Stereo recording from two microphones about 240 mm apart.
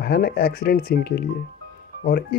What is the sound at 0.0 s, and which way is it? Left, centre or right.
Speech, left.